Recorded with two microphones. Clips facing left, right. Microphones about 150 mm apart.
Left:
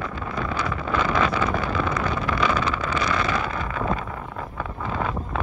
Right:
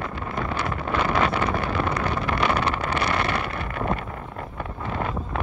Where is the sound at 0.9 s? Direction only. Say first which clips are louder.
Even; 30° right (ahead or behind).